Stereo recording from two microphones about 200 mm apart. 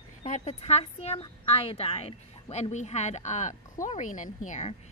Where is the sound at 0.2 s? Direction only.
30° left (ahead or behind).